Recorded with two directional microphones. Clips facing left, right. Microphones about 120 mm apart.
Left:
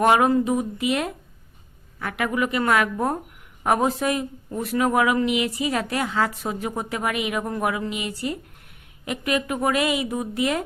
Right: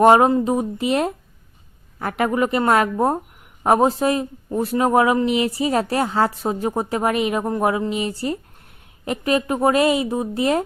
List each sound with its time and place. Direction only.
0.0 s speech: 30° right (ahead or behind)